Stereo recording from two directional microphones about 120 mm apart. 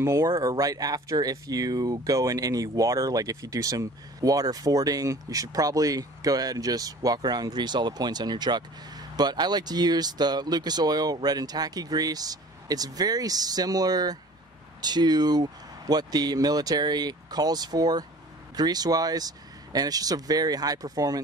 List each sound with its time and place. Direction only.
0.0 s speech: 25° right (ahead or behind)